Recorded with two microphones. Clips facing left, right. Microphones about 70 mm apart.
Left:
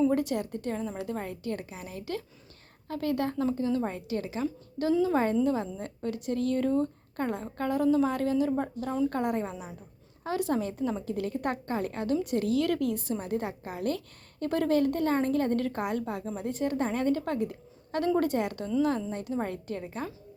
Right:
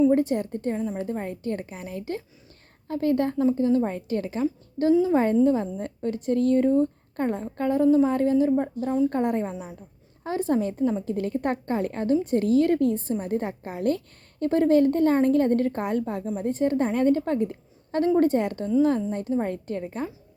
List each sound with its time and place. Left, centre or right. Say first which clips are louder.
0.0 s a woman's voice: right 6 dB; right